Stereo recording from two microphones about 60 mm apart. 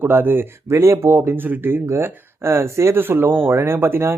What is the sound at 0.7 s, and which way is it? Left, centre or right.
Speech, right.